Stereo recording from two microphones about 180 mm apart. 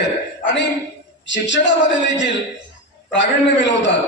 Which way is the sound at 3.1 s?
85° left.